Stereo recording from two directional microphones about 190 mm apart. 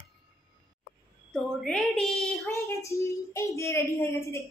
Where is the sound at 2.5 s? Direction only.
15° left (ahead or behind).